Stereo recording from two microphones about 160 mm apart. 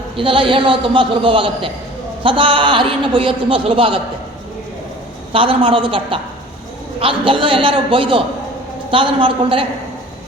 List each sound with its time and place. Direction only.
0.2 s a man's voice: 30° right (ahead or behind)
5.3 s a man's voice: 35° right (ahead or behind)